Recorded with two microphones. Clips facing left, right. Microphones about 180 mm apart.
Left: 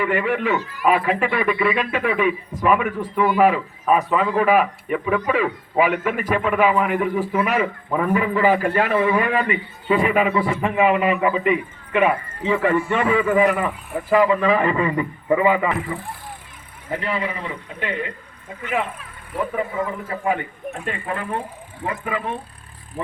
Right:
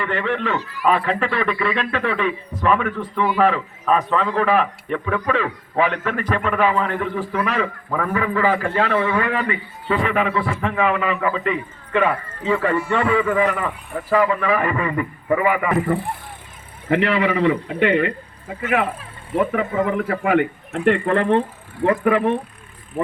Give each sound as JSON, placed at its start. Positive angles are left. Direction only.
{"t": 0.0, "sound": "a man's voice", "side_deg": 10}
{"t": 16.9, "sound": "a man's voice", "side_deg": -75}
{"t": 19.5, "sound": "a man's voice", "side_deg": -75}
{"t": 21.8, "sound": "speech", "side_deg": -65}